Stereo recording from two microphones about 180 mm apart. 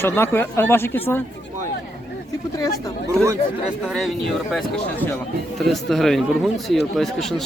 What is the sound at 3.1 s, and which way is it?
Speech, 15° right (ahead or behind).